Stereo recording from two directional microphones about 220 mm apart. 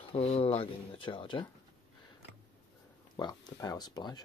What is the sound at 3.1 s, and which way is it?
Speech, 15° left (ahead or behind).